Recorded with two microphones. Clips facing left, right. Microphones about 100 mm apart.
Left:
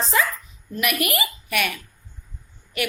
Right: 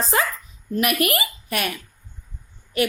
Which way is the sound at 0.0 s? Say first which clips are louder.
Even; 45° right (ahead or behind).